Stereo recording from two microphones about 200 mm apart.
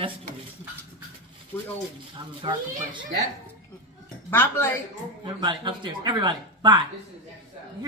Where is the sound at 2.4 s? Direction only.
25° right (ahead or behind).